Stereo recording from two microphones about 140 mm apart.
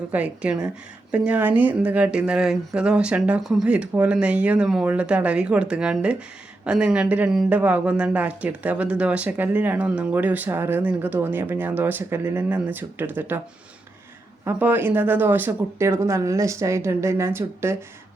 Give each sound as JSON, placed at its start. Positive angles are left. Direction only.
{"t": 0.1, "sound": "speech", "side_deg": -10}
{"t": 14.4, "sound": "speech", "side_deg": -15}